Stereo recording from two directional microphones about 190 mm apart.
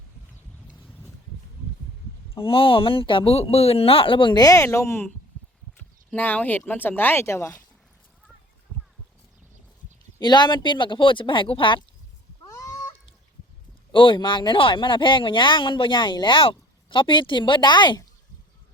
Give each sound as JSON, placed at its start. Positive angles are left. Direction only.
{"t": 0.7, "sound": "boat", "side_deg": 10}
{"t": 2.4, "sound": "speech", "side_deg": 30}
{"t": 10.2, "sound": "speech", "side_deg": 25}
{"t": 12.5, "sound": "a sound", "side_deg": 15}
{"t": 13.9, "sound": "speech", "side_deg": 25}